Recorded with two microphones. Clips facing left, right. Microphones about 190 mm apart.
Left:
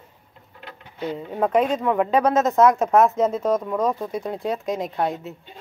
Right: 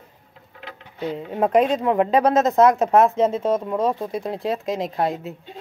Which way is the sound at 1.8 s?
30° right (ahead or behind).